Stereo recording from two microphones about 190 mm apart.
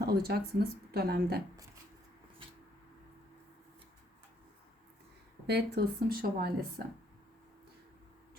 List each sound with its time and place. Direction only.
0.0 s speech: 55° right (ahead or behind)
5.5 s speech: 60° right (ahead or behind)